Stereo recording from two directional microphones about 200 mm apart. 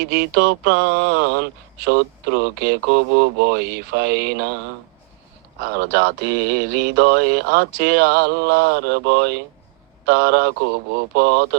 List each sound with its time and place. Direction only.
0.0 s speech: 55° right (ahead or behind)
5.7 s speech: 55° right (ahead or behind)